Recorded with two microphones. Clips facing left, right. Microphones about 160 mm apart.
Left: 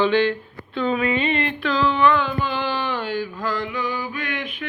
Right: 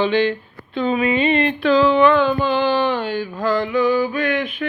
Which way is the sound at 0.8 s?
15° right (ahead or behind).